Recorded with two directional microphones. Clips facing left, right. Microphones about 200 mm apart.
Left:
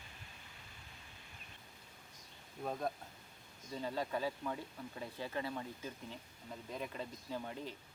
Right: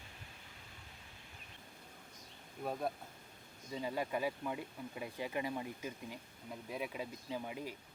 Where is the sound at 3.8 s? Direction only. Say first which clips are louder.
Right 1 dB; 10° right (ahead or behind).